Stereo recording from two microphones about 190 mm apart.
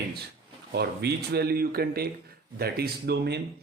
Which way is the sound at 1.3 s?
55° right (ahead or behind).